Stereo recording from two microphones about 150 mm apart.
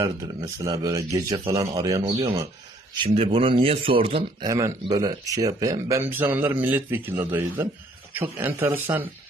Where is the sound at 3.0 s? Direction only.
40° right (ahead or behind).